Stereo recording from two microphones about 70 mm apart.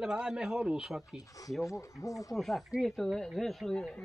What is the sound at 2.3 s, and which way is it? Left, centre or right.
A man's voice, centre.